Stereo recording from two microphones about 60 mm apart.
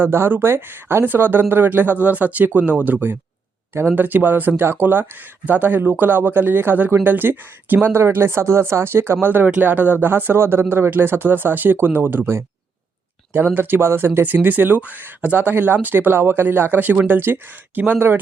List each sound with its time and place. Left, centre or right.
0.0 s speech: right
9.2 s speech: right
13.3 s speech: right